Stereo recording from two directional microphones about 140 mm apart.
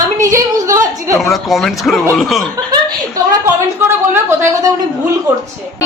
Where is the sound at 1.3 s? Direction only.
Centre (ahead or behind).